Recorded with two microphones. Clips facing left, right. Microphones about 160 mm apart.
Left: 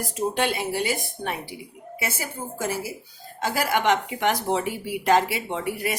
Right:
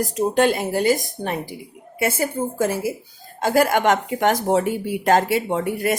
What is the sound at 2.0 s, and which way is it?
Speech, 55° right (ahead or behind).